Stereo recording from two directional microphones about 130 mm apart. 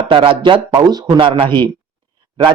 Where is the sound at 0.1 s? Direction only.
40° right (ahead or behind).